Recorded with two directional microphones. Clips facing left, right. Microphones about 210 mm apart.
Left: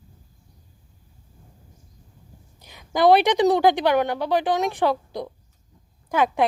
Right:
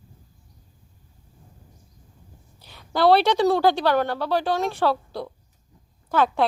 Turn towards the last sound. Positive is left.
turn(degrees=15)  # may be behind; listen again after turning